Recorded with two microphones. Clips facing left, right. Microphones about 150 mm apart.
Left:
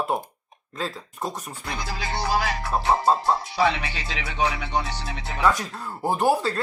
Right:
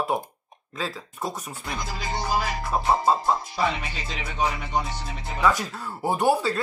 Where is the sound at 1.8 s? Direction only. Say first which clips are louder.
Left 2 dB; 70° left (ahead or behind).